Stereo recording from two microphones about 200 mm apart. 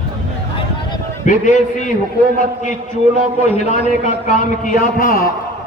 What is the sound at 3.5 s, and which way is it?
A man's voice, 35° left (ahead or behind).